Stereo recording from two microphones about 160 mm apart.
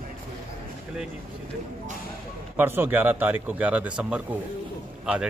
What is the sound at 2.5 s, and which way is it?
A man's voice, 15° right (ahead or behind).